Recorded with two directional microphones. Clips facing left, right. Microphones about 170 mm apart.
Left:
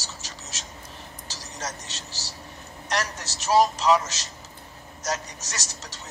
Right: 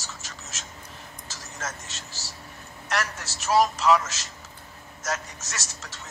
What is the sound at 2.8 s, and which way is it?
Speech, 20° left (ahead or behind).